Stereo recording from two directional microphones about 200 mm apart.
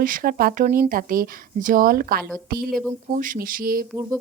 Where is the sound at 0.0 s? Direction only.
45° right (ahead or behind).